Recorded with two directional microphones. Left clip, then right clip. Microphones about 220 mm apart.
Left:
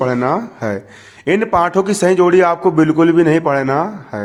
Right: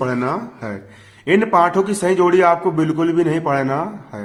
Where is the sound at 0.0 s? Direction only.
30° left (ahead or behind).